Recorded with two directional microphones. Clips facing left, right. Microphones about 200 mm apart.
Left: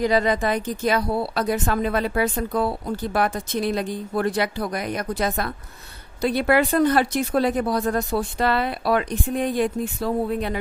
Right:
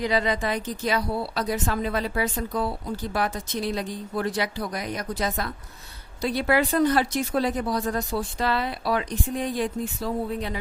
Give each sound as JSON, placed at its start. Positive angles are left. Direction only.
{"t": 0.0, "sound": "speech", "side_deg": 45}